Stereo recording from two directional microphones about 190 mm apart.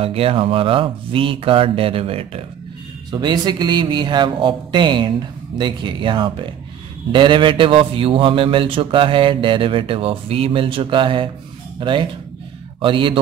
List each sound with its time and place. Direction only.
0.0 s a man's voice: 30° right (ahead or behind)